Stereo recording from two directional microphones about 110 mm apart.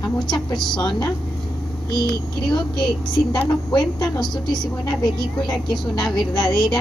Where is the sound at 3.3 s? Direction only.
5° left (ahead or behind).